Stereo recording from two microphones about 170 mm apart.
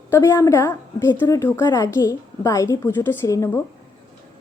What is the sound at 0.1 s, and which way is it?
A woman's voice, 20° left (ahead or behind).